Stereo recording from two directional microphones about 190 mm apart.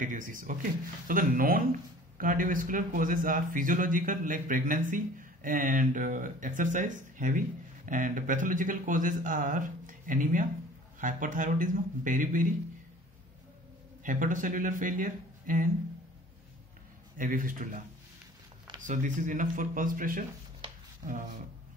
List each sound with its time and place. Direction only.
0.0 s speech: 45° right (ahead or behind)
14.0 s speech: 45° right (ahead or behind)
17.2 s speech: 45° right (ahead or behind)
18.8 s speech: 40° right (ahead or behind)